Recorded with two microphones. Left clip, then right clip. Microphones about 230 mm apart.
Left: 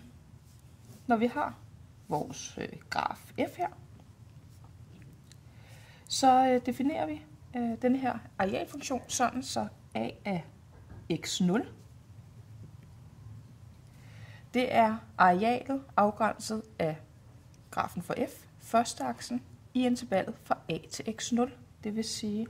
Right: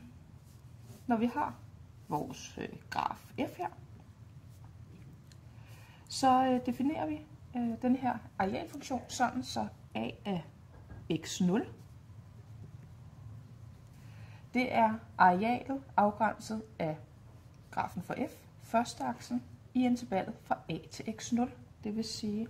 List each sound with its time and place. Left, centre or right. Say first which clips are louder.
1.0 s a woman's voice: left 4 dB; left
6.1 s a woman's voice: left 4 dB; left
14.5 s a woman's voice: left 3 dB; left